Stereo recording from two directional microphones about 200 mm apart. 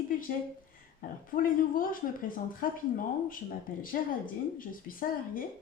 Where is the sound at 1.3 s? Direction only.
45° left (ahead or behind).